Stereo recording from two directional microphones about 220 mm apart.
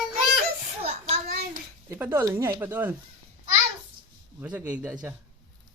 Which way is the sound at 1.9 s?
10° right (ahead or behind).